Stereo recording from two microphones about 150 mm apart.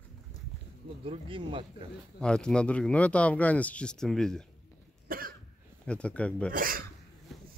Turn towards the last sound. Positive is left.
turn(degrees=-70)  # may be behind; listen again after turning